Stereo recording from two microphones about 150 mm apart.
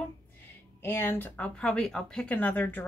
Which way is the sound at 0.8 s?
15° left (ahead or behind).